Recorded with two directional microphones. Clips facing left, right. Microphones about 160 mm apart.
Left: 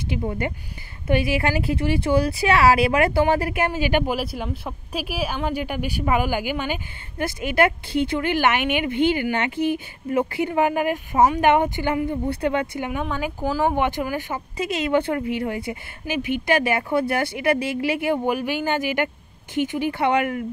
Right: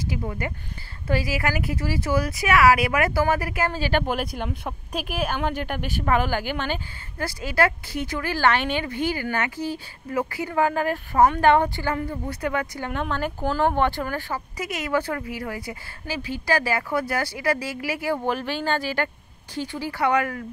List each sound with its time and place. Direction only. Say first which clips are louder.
0.1 s speech: left 7 dB; 25° left (ahead or behind)
4.1 s speech: left 1 dB; 5° left (ahead or behind)
7.2 s speech: left 3 dB; 20° left (ahead or behind)
12.9 s speech: right 3 dB; 10° left (ahead or behind)